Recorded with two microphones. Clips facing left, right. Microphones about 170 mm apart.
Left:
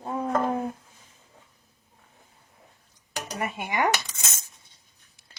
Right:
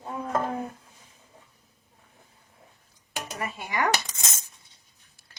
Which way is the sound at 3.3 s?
20° left (ahead or behind).